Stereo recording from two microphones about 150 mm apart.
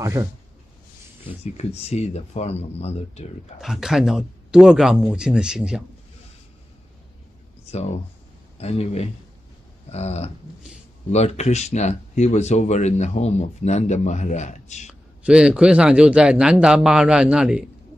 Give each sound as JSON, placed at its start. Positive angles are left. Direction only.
{"t": 0.0, "sound": "speech", "side_deg": -20}
{"t": 1.2, "sound": "speech", "side_deg": 45}
{"t": 3.6, "sound": "speech", "side_deg": 0}
{"t": 7.7, "sound": "speech", "side_deg": 45}
{"t": 14.9, "sound": "a man's voice", "side_deg": -5}